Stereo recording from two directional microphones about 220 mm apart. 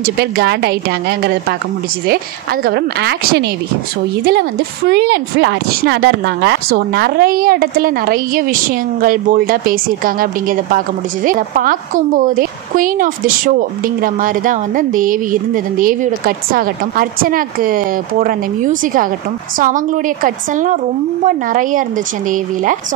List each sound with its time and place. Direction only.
0.0 s a woman's voice: 45° right (ahead or behind)